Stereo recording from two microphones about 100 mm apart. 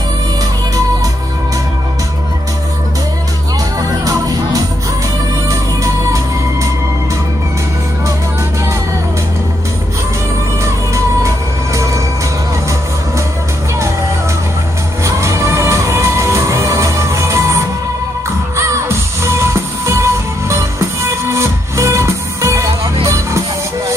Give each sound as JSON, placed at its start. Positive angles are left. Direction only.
{"t": 4.0, "sound": "music", "side_deg": -35}
{"t": 6.0, "sound": "music", "side_deg": -30}
{"t": 11.2, "sound": "music", "side_deg": -30}
{"t": 15.0, "sound": "music", "side_deg": -30}